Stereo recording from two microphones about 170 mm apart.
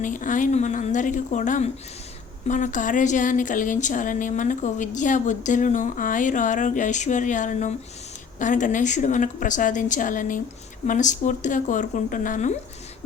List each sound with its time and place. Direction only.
0.0 s speech: 50° left (ahead or behind)